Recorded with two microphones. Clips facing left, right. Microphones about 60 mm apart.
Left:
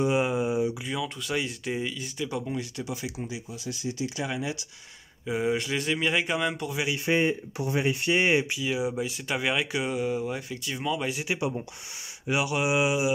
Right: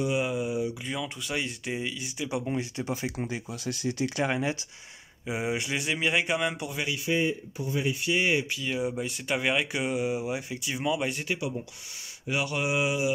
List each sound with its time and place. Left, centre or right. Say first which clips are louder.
0.0 s a sound: left 3 dB; left
0.8 s speech: left 2 dB; centre
2.4 s speech: right 2 dB; right
3.3 s speech: right 2 dB; right
5.2 s speech: left 3 dB; centre
7.1 s speech: left 2 dB; left
7.5 s speech: left 3 dB; left
7.8 s speech: left 3 dB; left
8.1 s speech: left 3 dB; left
8.5 s speech: left 2 dB; centre
11.3 s speech: left 3 dB; left
12.3 s mantra: left 3 dB; centre